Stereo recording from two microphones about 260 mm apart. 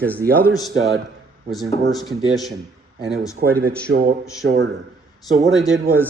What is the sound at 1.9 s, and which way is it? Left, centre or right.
Speech, centre.